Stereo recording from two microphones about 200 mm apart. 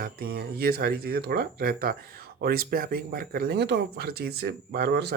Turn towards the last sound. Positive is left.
turn(degrees=-55)  # may be behind; listen again after turning